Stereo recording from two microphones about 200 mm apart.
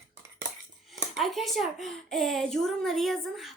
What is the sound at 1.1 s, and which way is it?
Speech, centre (ahead or behind).